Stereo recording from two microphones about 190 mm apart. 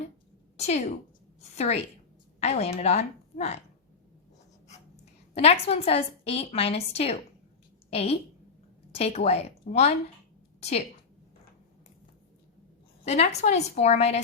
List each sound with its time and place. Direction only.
0.5 s a woman's voice: 35° left (ahead or behind)
1.4 s a sound: 35° left (ahead or behind)
2.4 s a woman's voice: 35° left (ahead or behind)
5.3 s a woman's voice: 35° left (ahead or behind)
13.1 s a woman's voice: 35° left (ahead or behind)